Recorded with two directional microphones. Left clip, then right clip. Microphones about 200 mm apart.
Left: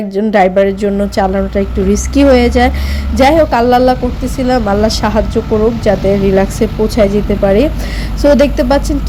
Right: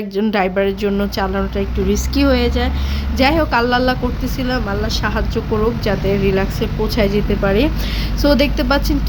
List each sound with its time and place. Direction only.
0.1 s speech: 10° left (ahead or behind)